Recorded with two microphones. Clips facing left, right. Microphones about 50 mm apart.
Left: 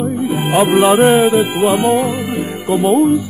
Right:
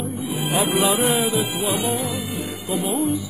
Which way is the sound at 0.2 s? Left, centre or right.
Left.